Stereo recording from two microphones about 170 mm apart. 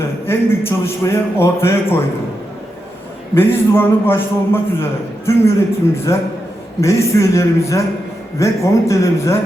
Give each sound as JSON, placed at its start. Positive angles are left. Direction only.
{"t": 0.3, "sound": "a man's voice", "side_deg": 15}
{"t": 3.3, "sound": "a man's voice", "side_deg": 15}